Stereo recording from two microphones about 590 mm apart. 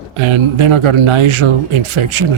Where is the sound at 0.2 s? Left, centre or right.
Right.